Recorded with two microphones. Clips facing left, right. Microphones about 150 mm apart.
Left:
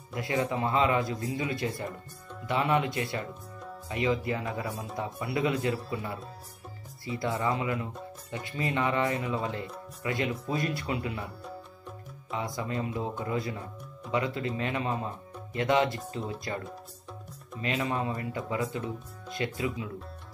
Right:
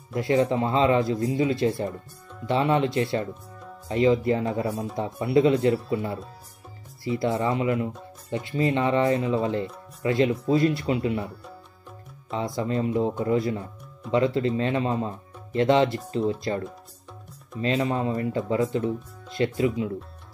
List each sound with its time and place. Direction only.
0.1 s a man's voice: 30° right (ahead or behind)
7.1 s a man's voice: 20° right (ahead or behind)